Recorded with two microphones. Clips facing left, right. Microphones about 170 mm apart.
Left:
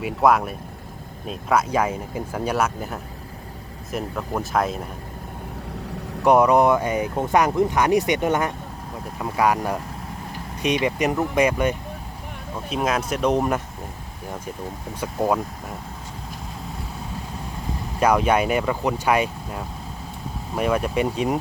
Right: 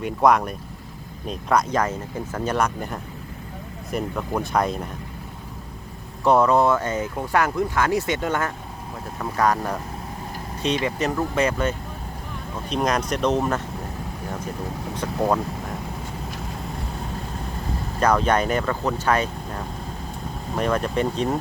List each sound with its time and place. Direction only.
0.0 s speech: 5° left (ahead or behind)
6.2 s speech: 15° left (ahead or behind)
12.7 s speech: 5° left (ahead or behind)
15.0 s speech: 10° left (ahead or behind)
18.0 s speech: 10° left (ahead or behind)